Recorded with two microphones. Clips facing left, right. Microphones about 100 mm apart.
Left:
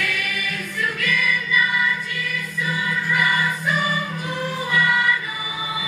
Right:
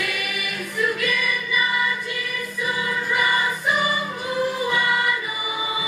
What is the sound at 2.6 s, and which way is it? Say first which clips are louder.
Choir: even; 20° right (ahead or behind).